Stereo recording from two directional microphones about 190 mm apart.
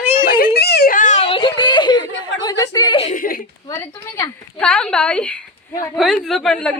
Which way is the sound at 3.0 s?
35° left (ahead or behind).